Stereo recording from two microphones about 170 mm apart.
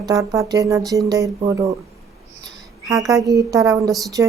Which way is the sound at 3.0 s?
20° right (ahead or behind).